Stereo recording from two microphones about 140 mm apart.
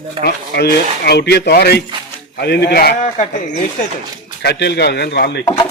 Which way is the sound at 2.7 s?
75° left (ahead or behind).